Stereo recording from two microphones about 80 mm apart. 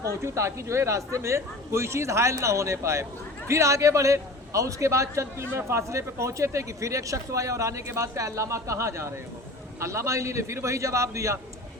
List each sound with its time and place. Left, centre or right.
0.2 s a man's voice: right